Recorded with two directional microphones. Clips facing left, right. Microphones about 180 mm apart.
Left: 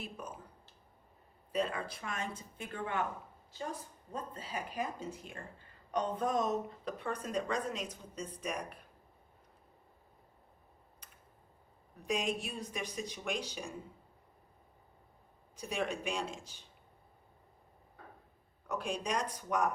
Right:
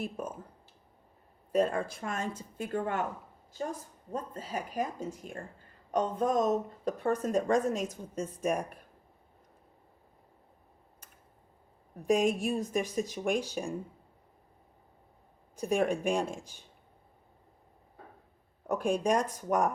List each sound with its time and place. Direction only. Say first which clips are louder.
0.0 s speech: right 8 dB; 45° right (ahead or behind)
1.5 s speech: right 7 dB; 45° right (ahead or behind)
11.9 s speech: right 8 dB; 45° right (ahead or behind)
15.5 s speech: right 8 dB; 45° right (ahead or behind)
18.7 s speech: right 8 dB; 50° right (ahead or behind)